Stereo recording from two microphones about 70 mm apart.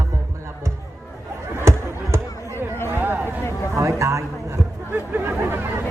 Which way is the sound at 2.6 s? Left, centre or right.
Left.